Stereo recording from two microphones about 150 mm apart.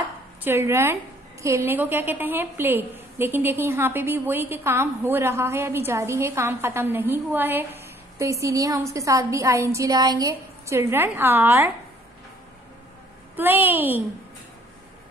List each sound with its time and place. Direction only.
0.4 s a woman's voice: 15° right (ahead or behind)
13.4 s a woman's voice: 15° right (ahead or behind)